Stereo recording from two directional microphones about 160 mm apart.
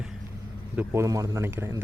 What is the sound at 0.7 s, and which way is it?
A man's voice, 15° right (ahead or behind).